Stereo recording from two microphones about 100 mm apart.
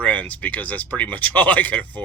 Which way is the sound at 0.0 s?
15° left (ahead or behind).